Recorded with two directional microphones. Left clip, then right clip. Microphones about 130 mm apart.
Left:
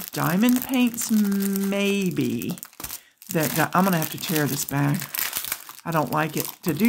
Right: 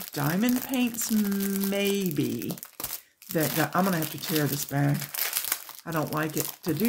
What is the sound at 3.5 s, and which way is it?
Speech, 65° left (ahead or behind).